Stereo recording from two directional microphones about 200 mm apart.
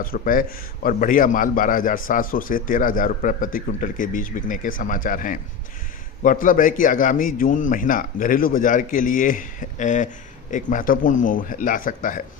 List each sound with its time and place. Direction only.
0.0 s a man's voice: 45° left (ahead or behind)